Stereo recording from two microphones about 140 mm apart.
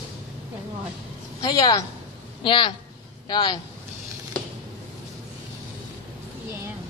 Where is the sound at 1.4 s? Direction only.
25° left (ahead or behind).